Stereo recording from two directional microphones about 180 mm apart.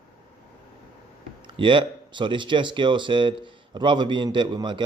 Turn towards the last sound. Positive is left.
turn(degrees=-25)  # may be behind; listen again after turning